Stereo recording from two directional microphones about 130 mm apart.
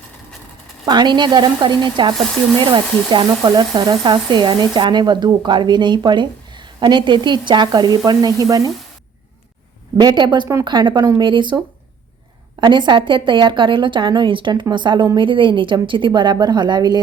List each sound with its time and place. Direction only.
0.9 s speech: 35° right (ahead or behind)
10.0 s speech: 35° right (ahead or behind)